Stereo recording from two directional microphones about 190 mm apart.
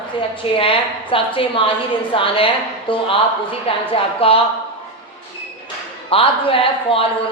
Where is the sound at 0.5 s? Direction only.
30° left (ahead or behind).